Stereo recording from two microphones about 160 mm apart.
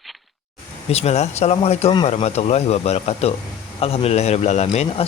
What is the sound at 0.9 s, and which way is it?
Speech, 40° left (ahead or behind).